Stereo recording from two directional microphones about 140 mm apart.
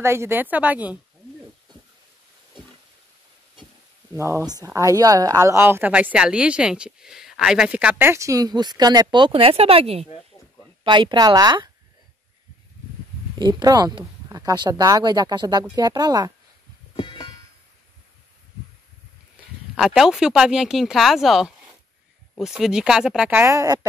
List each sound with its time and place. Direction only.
0.0 s a woman's voice: 20° right (ahead or behind)
4.1 s speech: 20° right (ahead or behind); by 10.0 s 45° right (ahead or behind)
10.8 s speech: 35° right (ahead or behind)
13.4 s speech: 30° right (ahead or behind)
16.9 s music: 35° left (ahead or behind)
19.8 s speech: 5° right (ahead or behind)
23.4 s speech: 20° right (ahead or behind)